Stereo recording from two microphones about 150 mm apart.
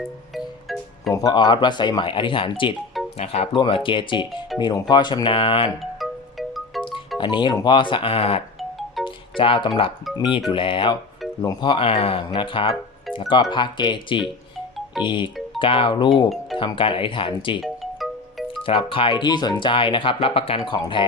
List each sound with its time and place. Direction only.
0.3 s music: centre (ahead or behind)
1.1 s speech: 25° left (ahead or behind)
5.8 s music: centre (ahead or behind)
7.2 s speech: 30° left (ahead or behind)
17.6 s music: centre (ahead or behind)
18.6 s speech: 35° left (ahead or behind)